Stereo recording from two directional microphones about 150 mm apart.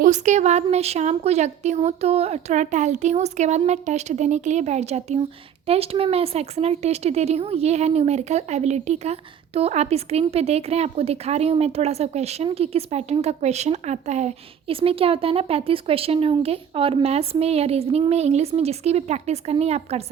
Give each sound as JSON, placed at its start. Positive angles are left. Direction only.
{"t": 0.0, "sound": "speech", "side_deg": -50}